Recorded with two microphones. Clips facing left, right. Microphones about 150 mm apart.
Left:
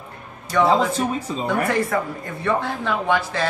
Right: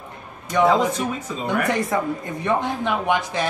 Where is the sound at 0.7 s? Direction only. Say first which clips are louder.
Right 1 dB; 30° left (ahead or behind).